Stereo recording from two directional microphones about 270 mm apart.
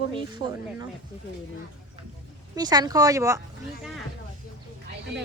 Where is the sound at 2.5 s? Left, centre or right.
Centre.